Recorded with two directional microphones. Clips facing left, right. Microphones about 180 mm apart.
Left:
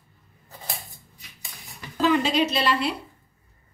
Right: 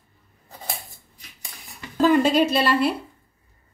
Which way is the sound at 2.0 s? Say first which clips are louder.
Right 4 dB; 50° right (ahead or behind).